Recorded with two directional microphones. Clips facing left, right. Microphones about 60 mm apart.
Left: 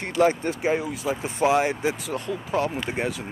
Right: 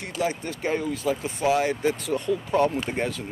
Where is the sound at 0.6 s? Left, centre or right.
Centre.